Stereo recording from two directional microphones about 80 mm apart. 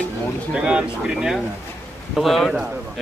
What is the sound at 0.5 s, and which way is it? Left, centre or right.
Speech, centre.